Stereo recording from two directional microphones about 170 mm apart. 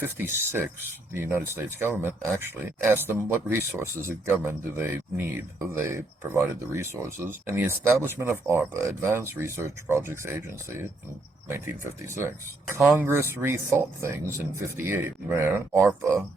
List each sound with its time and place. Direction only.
0.0 s speech: 15° right (ahead or behind)